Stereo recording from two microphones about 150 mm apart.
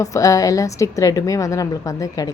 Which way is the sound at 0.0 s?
20° left (ahead or behind).